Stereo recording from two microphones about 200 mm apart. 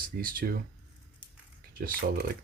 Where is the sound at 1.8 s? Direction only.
45° right (ahead or behind).